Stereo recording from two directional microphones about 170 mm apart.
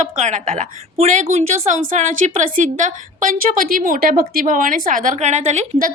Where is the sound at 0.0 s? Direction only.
45° right (ahead or behind).